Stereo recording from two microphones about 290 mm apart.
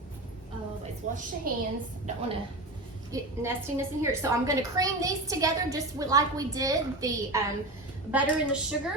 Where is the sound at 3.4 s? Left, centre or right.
Centre.